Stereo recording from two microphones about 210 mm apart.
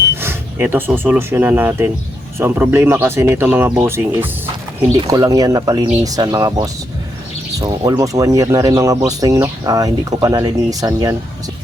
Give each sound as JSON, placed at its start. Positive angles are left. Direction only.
{"t": 0.2, "sound": "speech", "side_deg": -10}